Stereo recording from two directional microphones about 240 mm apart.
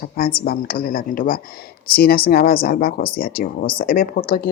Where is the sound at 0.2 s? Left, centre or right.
Left.